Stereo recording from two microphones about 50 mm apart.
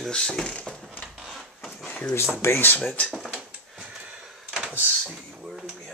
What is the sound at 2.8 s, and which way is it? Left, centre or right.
Speech, left.